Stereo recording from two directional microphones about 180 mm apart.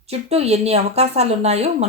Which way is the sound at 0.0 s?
35° right (ahead or behind).